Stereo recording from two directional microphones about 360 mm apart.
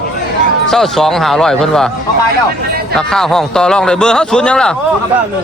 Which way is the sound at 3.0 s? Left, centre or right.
Centre.